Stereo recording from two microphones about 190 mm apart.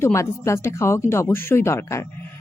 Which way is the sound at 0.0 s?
15° left (ahead or behind).